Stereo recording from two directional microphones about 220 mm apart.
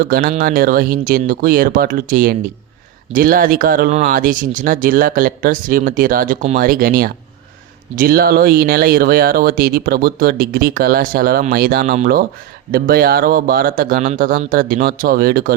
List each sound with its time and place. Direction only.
0.0 s speech: 40° right (ahead or behind)